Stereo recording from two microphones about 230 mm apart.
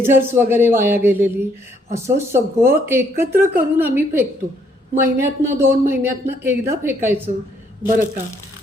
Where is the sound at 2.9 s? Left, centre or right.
Centre.